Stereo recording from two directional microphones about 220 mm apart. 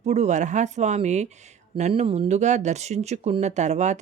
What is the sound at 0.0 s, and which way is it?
Speech, 30° right (ahead or behind).